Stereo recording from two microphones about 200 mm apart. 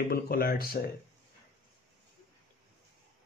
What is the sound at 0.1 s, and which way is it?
Speech, 50° left (ahead or behind).